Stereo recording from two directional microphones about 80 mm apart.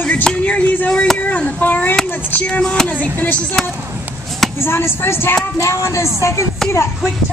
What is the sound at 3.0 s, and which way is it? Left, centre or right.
Speech, centre.